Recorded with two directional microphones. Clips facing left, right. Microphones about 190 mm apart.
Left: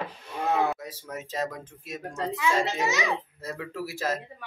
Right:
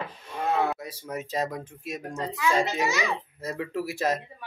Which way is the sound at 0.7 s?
10° right (ahead or behind).